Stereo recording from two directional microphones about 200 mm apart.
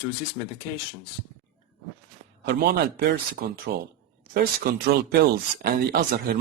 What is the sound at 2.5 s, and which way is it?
Speech, 50° right (ahead or behind).